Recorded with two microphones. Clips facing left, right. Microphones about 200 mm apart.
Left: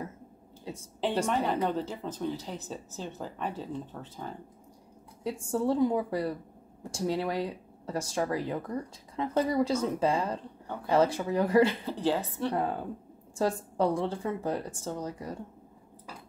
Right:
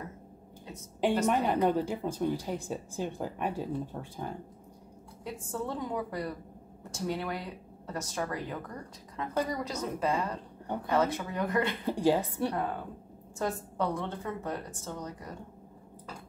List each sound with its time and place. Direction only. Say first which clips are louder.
1.0 s speech: right 1 dB; 10° right (ahead or behind)
5.5 s a woman's voice: left 9 dB; 30° left (ahead or behind)
11.8 s speech: right 3 dB; 15° right (ahead or behind)
13.4 s a woman's voice: left 4 dB; 30° left (ahead or behind)